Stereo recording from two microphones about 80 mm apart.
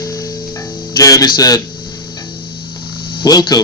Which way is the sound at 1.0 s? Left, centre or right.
Left.